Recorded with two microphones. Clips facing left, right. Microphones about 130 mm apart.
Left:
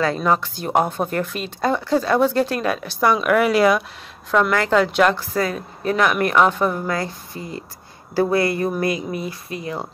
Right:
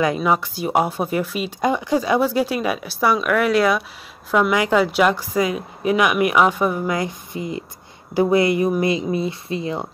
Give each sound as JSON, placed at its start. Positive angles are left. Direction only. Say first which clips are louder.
{"t": 0.0, "sound": "speech", "louder": "right 1 dB", "side_deg": -10}
{"t": 8.9, "sound": "speech", "louder": "right 4 dB", "side_deg": -25}